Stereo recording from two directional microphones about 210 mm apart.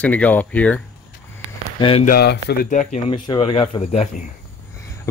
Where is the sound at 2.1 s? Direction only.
50° left (ahead or behind).